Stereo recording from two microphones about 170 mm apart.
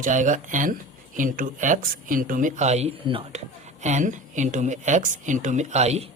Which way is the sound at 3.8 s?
45° right (ahead or behind).